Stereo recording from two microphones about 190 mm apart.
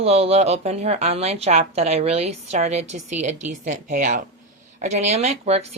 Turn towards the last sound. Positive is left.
turn(degrees=-35)  # may be behind; listen again after turning